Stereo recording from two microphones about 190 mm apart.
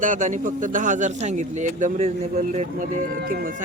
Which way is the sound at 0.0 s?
40° right (ahead or behind).